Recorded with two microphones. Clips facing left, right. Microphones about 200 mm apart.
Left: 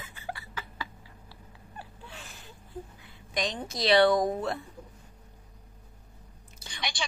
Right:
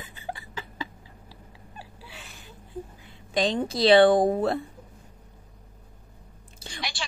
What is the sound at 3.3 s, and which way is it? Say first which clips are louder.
A woman's voice: right 8 dB; 30° right (ahead or behind).